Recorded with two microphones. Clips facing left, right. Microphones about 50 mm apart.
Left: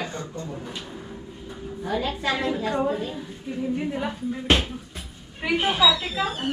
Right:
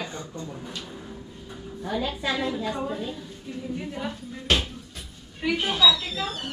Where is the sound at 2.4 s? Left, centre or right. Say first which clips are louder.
Left 4 dB; centre.